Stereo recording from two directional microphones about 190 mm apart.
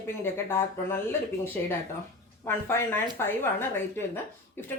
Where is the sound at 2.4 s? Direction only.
10° left (ahead or behind).